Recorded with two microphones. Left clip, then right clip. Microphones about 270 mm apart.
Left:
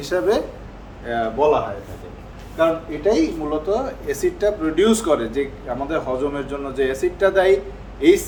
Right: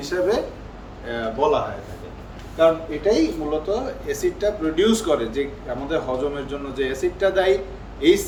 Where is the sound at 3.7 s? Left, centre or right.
Centre.